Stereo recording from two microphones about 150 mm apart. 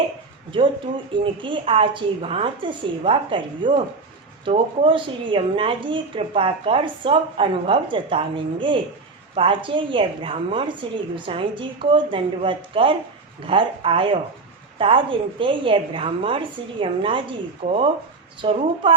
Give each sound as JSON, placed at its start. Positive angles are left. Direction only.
{"t": 1.1, "sound": "a woman's voice", "side_deg": -35}